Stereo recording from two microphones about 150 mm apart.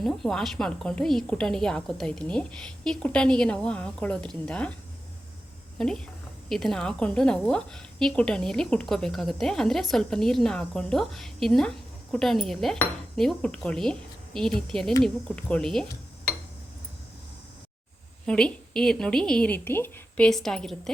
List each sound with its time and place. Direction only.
0.0 s a woman's voice: centre (ahead or behind)
5.7 s a woman's voice: 5° left (ahead or behind)
18.3 s a woman's voice: 5° left (ahead or behind)